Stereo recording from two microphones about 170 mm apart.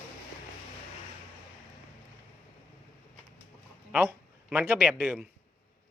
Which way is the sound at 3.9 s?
10° right (ahead or behind).